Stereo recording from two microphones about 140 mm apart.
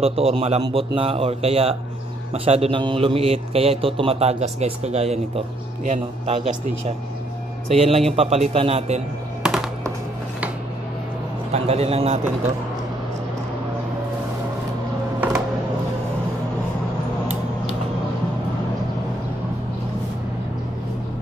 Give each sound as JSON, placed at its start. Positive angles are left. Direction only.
{"t": 0.0, "sound": "a man's voice", "side_deg": -45}
{"t": 7.7, "sound": "a man's voice", "side_deg": -45}
{"t": 11.5, "sound": "a man's voice", "side_deg": -45}